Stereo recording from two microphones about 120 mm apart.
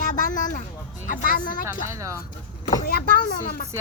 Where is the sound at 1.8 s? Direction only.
25° right (ahead or behind).